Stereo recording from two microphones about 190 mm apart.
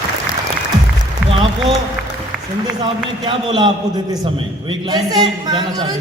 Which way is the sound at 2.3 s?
5° right (ahead or behind).